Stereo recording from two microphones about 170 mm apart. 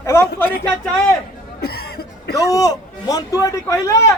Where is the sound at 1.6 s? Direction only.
70° left (ahead or behind).